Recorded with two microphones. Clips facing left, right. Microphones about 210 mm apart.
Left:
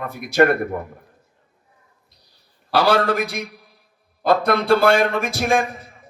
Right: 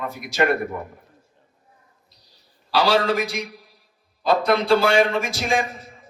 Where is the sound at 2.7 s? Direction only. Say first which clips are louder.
Left 2 dB; 55° left (ahead or behind).